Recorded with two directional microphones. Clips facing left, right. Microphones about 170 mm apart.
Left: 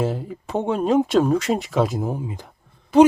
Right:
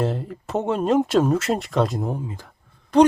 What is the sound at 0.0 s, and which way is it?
Speech, centre (ahead or behind).